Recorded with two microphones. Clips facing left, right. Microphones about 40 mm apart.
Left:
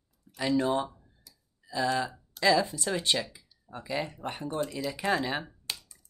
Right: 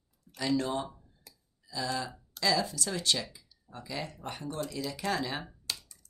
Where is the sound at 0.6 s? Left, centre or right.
Left.